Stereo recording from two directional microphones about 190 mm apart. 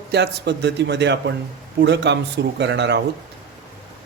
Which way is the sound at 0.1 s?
65° right (ahead or behind).